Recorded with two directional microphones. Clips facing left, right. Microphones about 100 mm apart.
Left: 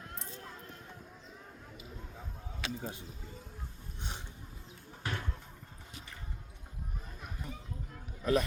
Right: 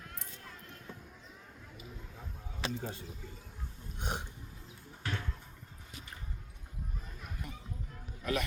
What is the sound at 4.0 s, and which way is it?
Burping, 55° right (ahead or behind).